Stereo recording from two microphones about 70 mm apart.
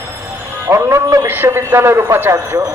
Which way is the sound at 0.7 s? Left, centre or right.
Right.